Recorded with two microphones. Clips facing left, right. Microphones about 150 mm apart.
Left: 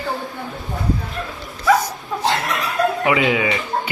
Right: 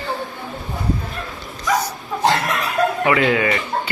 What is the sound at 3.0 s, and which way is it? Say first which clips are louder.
Speech: right 1 dB; 10° left (ahead or behind).